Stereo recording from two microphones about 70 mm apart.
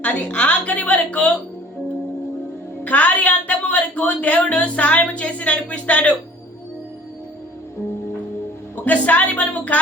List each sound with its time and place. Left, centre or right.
0.0 s speech: centre
2.8 s speech: left
8.7 s speech: left